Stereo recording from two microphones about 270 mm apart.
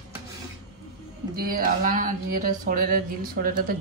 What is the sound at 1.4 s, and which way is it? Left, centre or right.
Speech, right.